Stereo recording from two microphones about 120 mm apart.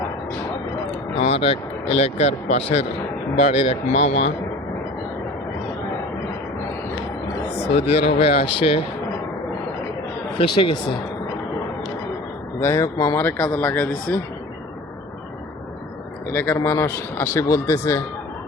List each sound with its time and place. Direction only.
1.4 s speech: 55° left (ahead or behind); by 4.3 s 80° left
7.6 s speech: 55° left (ahead or behind)
10.3 s speech: 45° left (ahead or behind)
12.5 s a man's voice: 25° left (ahead or behind)
13.1 s speech: 15° left (ahead or behind)
16.3 s a man's voice: 15° left (ahead or behind)